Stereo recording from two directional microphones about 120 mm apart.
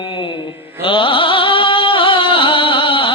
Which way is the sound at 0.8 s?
45° left (ahead or behind).